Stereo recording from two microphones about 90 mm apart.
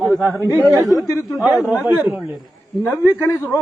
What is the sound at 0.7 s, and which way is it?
Speech, 40° right (ahead or behind).